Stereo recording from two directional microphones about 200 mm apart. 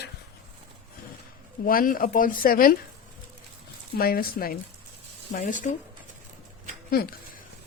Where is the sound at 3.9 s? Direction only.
50° left (ahead or behind).